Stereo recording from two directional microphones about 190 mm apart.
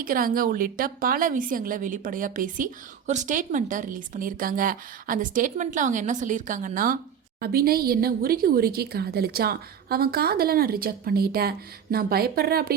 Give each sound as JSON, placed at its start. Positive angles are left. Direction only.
{"t": 0.0, "sound": "speech", "side_deg": -50}